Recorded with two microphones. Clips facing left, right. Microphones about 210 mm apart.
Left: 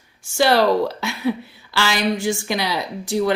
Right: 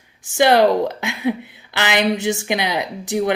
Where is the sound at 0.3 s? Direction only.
20° right (ahead or behind).